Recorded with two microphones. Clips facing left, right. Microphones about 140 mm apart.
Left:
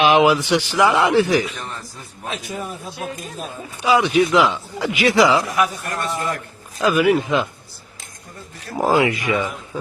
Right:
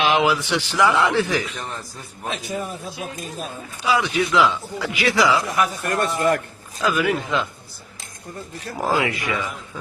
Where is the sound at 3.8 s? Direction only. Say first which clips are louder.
Left 5 dB; 20° left (ahead or behind).